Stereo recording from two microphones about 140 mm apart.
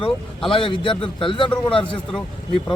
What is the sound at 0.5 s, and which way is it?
Speech, 40° left (ahead or behind).